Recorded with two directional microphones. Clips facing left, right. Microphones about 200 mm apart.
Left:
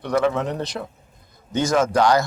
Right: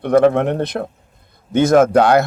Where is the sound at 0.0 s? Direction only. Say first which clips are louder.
Right 8 dB; 55° right (ahead or behind).